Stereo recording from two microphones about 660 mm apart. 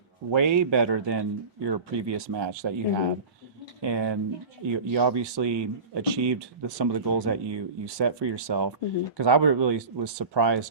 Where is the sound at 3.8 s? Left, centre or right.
Right.